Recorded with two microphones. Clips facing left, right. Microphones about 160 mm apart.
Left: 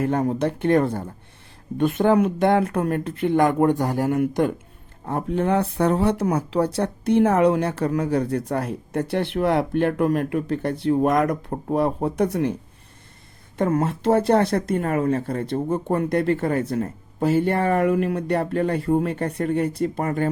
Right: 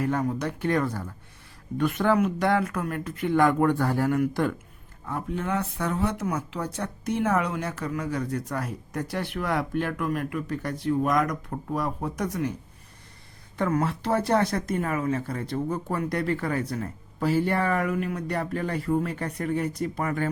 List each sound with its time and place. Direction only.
0.0 s speech: 30° left (ahead or behind)
5.0 s speech: 40° left (ahead or behind)
13.6 s speech: 25° left (ahead or behind); by 15.1 s 40° left (ahead or behind)
15.5 s speech: 25° left (ahead or behind)